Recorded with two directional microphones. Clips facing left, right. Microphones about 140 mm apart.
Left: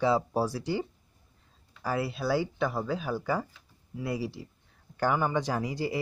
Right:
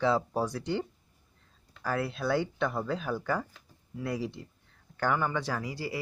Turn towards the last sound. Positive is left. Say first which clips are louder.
# left 4 dB
turn(degrees=20)  # may be behind; listen again after turning